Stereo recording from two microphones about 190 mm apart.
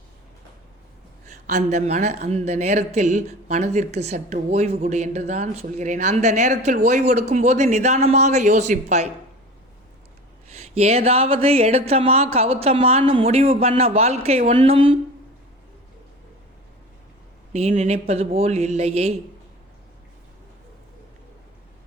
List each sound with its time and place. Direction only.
1.3 s a woman's voice: 40° right (ahead or behind)
10.5 s a woman's voice: 35° right (ahead or behind)
17.5 s a woman's voice: 35° right (ahead or behind)